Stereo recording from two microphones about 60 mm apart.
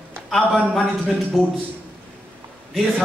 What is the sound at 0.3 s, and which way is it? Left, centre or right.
Speech, centre.